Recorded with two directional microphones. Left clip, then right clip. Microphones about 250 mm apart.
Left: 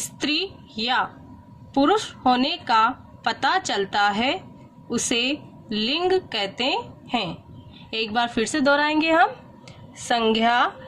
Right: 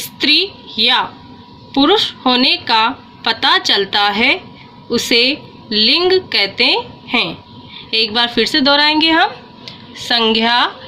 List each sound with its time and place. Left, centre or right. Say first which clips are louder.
0.3 s a woman's voice: right 12 dB; centre